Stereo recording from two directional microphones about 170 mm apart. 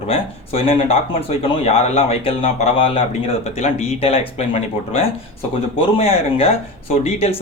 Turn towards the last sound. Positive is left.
turn(degrees=35)  # may be behind; listen again after turning